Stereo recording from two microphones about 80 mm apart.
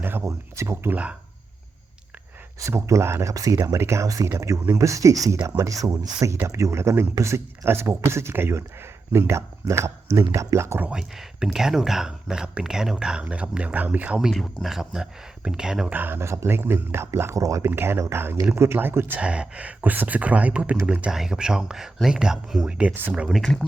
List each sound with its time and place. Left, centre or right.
0.0 s a sound: right
0.3 s speech: right
2.6 s speech: right
6.3 s speech: right
10.9 s speech: centre
14.2 s speech: centre
15.9 s speech: right
17.7 s speech: right
19.2 s speech: centre